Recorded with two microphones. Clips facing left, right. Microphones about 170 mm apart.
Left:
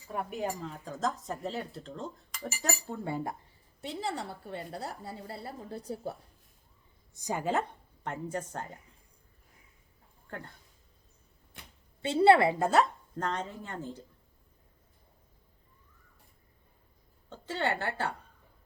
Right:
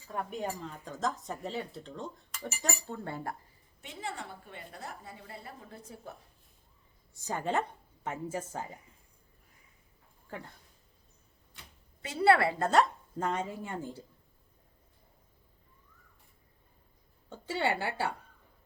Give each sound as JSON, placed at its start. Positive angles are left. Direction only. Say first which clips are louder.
{"t": 0.1, "sound": "speech", "louder": "left 2 dB", "side_deg": 5}
{"t": 3.8, "sound": "a woman's voice", "louder": "left 5 dB", "side_deg": 35}
{"t": 7.1, "sound": "a woman's voice", "louder": "left 1 dB", "side_deg": 15}
{"t": 8.0, "sound": "speech", "louder": "even", "side_deg": -5}
{"t": 10.2, "sound": "speech", "louder": "even", "side_deg": 0}
{"t": 12.0, "sound": "a woman's voice", "louder": "left 4 dB", "side_deg": 25}
{"t": 13.1, "sound": "speech", "louder": "right 1 dB", "side_deg": -10}
{"t": 17.2, "sound": "a woman's voice", "louder": "right 1 dB", "side_deg": -10}